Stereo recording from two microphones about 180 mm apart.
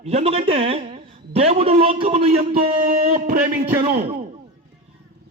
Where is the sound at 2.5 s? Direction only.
45° right (ahead or behind).